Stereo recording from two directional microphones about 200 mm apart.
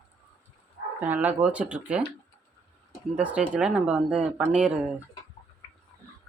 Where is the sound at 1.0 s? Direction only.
10° right (ahead or behind).